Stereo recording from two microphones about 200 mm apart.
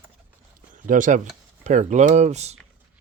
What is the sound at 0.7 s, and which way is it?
Speech, 40° right (ahead or behind).